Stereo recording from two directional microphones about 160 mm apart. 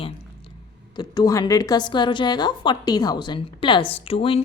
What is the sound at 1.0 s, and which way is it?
A woman's voice, 25° left (ahead or behind).